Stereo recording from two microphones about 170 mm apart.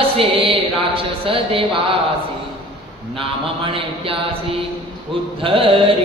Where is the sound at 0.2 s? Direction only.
30° right (ahead or behind).